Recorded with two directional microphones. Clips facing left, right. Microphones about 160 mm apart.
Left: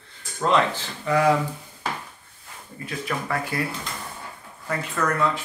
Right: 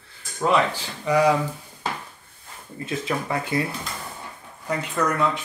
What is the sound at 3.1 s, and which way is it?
Speech, 20° right (ahead or behind).